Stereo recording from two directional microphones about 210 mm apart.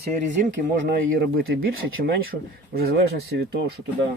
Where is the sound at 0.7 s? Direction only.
45° right (ahead or behind).